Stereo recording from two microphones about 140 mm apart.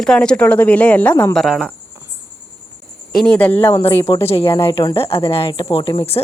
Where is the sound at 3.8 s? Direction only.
45° left (ahead or behind).